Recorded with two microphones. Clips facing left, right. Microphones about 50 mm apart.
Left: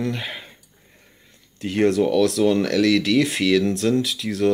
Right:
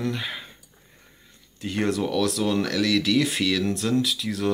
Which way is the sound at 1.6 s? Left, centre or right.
Left.